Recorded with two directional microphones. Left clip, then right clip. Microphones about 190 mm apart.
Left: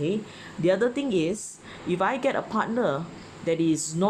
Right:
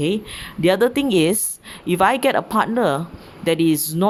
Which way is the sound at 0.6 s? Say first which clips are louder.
Right 7 dB; 40° right (ahead or behind).